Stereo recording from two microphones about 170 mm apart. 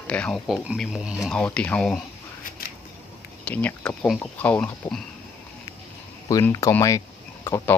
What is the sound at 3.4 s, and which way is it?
Speech, 5° left (ahead or behind).